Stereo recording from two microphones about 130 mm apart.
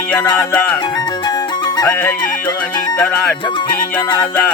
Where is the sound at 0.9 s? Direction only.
30° left (ahead or behind).